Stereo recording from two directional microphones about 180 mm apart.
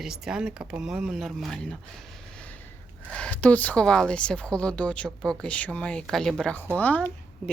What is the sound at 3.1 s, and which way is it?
Speech, 5° left (ahead or behind).